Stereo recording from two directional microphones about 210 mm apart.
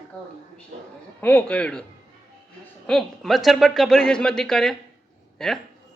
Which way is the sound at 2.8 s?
Centre (ahead or behind).